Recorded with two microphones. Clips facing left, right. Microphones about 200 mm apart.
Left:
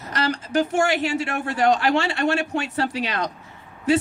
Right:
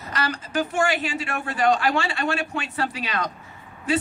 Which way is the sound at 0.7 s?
70° left (ahead or behind).